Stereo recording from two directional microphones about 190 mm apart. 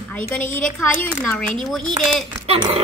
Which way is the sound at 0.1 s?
10° left (ahead or behind).